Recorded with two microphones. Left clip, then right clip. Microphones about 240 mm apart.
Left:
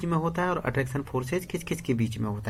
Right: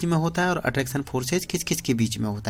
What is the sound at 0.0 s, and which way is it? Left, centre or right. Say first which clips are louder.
Speech: right 3 dB; right.